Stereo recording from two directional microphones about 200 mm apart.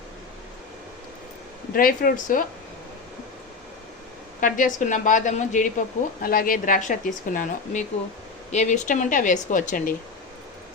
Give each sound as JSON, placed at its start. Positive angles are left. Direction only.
{"t": 1.7, "sound": "speech", "side_deg": 45}
{"t": 4.4, "sound": "speech", "side_deg": 40}